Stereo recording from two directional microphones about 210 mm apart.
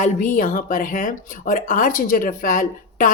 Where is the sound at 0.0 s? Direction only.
40° left (ahead or behind).